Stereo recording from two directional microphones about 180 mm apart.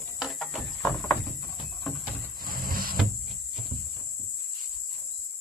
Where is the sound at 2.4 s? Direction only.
55° right (ahead or behind).